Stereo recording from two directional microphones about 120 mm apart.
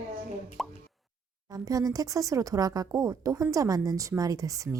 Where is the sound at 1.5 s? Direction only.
30° right (ahead or behind).